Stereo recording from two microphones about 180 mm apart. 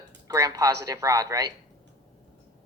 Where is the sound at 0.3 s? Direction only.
20° right (ahead or behind).